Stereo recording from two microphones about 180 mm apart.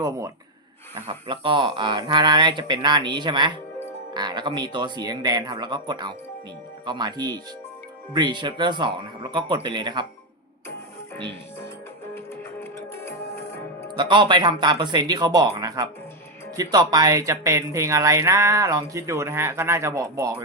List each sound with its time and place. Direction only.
1.0 s speech: 25° right (ahead or behind)
13.9 s speech: 25° right (ahead or behind)